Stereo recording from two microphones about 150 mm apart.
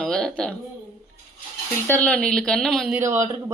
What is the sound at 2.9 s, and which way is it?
Speech, 15° right (ahead or behind).